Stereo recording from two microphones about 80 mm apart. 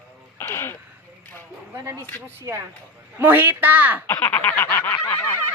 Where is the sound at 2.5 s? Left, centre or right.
Right.